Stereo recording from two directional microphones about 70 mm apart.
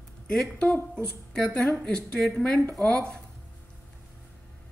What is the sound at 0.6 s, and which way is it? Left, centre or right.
A woman's voice, left.